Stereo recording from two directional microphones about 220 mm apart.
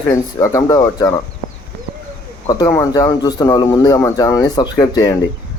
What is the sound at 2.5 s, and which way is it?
Speech, 15° left (ahead or behind).